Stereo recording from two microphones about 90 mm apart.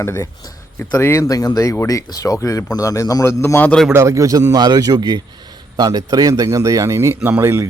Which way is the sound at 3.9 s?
35° right (ahead or behind).